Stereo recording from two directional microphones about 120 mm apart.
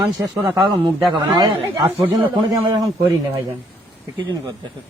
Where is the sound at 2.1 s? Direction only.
30° right (ahead or behind).